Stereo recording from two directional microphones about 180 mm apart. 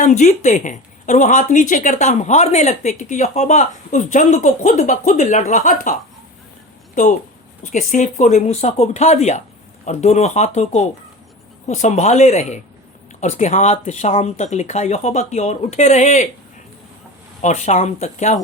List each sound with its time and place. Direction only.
0.0 s a woman's voice: 40° left (ahead or behind)
7.6 s speech: 45° left (ahead or behind)
17.4 s speech: 40° left (ahead or behind)